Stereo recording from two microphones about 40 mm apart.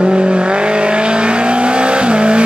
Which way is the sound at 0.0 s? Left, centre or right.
Right.